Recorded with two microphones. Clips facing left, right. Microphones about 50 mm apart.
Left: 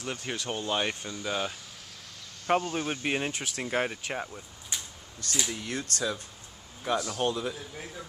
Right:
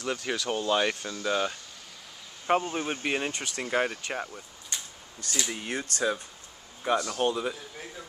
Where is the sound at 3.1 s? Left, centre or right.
Centre.